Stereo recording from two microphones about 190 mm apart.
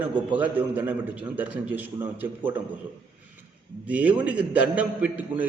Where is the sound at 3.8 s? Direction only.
10° right (ahead or behind).